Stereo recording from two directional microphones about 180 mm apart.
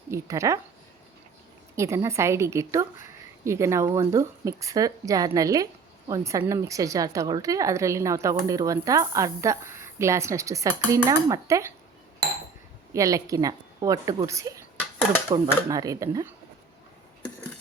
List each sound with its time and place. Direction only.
0.1 s speech: 15° right (ahead or behind)
1.7 s speech: 15° right (ahead or behind)
12.9 s a woman's voice: 20° right (ahead or behind)
15.7 s a woman's voice: 20° right (ahead or behind)